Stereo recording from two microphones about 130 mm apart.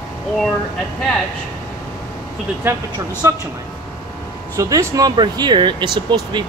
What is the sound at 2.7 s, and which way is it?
Speech, 25° right (ahead or behind).